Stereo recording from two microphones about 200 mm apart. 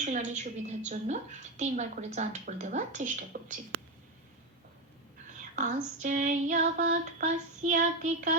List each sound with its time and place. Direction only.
0.0 s a woman's voice: 40° right (ahead or behind)
5.5 s a woman's voice: 40° right (ahead or behind)